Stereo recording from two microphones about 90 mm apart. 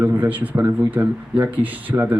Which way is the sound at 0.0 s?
20° right (ahead or behind).